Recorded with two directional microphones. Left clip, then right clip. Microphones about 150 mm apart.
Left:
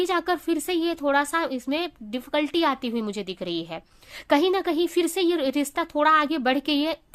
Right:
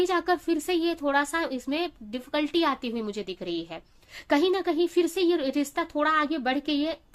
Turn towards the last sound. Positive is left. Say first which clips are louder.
# left 4 dB
turn(degrees=45)  # may be behind; listen again after turning